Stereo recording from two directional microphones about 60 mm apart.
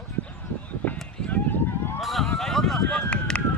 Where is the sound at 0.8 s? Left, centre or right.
Left.